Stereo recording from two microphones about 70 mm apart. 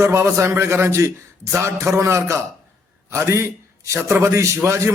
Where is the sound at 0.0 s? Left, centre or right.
Right.